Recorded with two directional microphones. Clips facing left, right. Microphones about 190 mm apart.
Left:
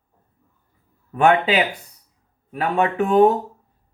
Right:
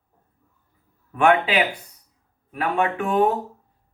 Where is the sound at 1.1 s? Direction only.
35° left (ahead or behind).